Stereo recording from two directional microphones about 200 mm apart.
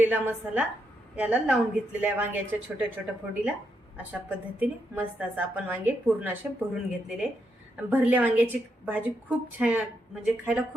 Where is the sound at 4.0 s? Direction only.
10° right (ahead or behind).